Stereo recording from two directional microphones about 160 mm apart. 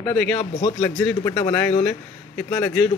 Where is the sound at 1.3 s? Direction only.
20° left (ahead or behind).